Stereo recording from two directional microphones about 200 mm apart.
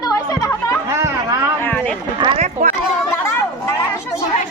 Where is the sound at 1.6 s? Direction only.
5° left (ahead or behind).